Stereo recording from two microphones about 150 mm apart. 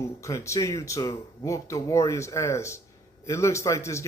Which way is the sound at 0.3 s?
20° left (ahead or behind).